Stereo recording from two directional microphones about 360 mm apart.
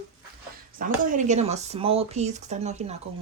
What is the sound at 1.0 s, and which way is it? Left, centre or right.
A woman's voice, right.